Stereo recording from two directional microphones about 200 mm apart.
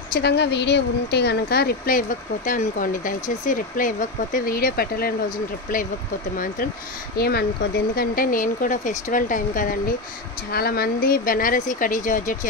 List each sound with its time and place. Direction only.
0.1 s speech: 55° left (ahead or behind)
7.2 s speech: 50° left (ahead or behind)